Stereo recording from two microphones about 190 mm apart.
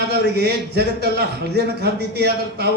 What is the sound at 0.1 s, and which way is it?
Speech, 60° right (ahead or behind).